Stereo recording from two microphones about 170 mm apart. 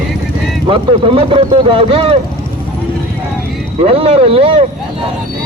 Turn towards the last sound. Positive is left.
turn(degrees=-35)  # may be behind; listen again after turning